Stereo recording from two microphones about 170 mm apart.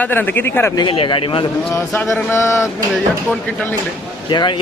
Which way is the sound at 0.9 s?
30° left (ahead or behind).